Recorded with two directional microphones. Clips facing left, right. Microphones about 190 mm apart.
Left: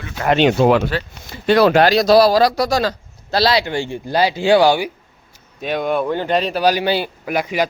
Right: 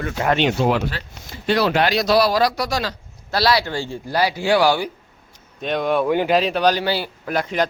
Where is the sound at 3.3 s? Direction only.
25° left (ahead or behind).